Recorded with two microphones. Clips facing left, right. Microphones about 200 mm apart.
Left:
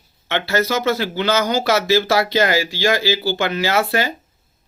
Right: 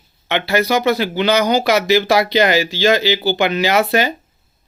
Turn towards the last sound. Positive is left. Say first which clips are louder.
# right 3 dB
turn(degrees=-20)  # may be behind; listen again after turning